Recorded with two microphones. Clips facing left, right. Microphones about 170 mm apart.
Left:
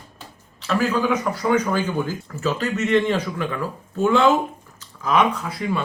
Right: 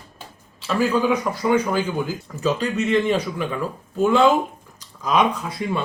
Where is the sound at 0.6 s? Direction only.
10° right (ahead or behind).